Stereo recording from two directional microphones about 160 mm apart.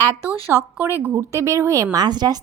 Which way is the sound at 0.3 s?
15° right (ahead or behind).